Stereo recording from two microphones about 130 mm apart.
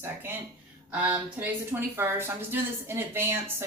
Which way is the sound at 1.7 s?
15° right (ahead or behind).